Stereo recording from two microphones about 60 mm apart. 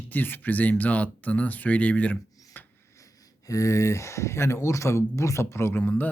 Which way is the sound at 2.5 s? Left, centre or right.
Left.